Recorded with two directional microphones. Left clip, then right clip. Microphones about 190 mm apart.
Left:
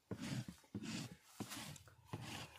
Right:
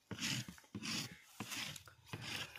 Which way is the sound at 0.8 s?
25° left (ahead or behind).